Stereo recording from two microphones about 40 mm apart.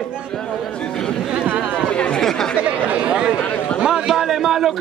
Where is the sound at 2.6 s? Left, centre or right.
Right.